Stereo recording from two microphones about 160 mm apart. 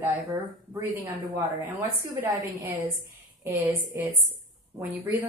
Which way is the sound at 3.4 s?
15° right (ahead or behind).